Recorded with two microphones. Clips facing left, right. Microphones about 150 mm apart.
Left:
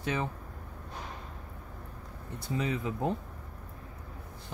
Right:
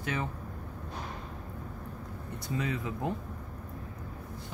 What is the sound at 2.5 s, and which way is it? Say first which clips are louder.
Speech: left 2 dB; 20° left (ahead or behind).